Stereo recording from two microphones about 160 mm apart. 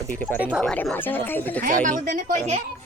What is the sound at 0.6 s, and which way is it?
Speech, 5° left (ahead or behind).